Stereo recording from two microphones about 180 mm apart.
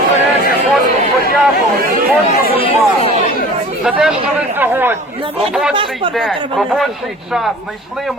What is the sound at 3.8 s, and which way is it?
A man's voice, 5° right (ahead or behind).